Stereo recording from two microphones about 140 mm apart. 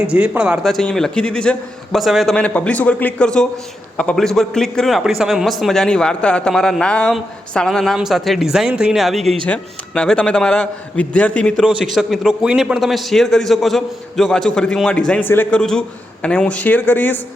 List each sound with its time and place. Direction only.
0.1 s a man's voice: 10° right (ahead or behind); by 11.5 s 10° left (ahead or behind)
11.6 s a man's voice: centre (ahead or behind); by 17.2 s 15° left (ahead or behind)